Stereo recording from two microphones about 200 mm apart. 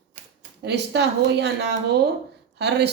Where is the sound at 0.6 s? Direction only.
60° right (ahead or behind).